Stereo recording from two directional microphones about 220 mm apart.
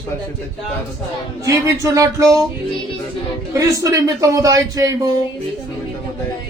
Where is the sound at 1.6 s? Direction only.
15° right (ahead or behind).